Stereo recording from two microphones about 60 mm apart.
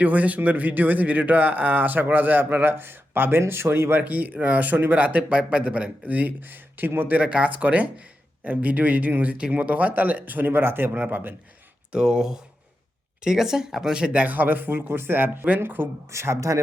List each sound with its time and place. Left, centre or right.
0.0 s speech: right
4.0 s speech: right
7.2 s speech: centre
11.9 s speech: centre; by 15.9 s right
16.1 s speech: right